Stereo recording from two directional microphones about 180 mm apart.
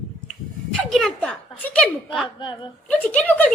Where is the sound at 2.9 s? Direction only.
5° left (ahead or behind).